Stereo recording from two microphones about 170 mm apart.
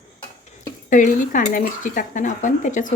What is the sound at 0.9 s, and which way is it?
Speech, 50° left (ahead or behind).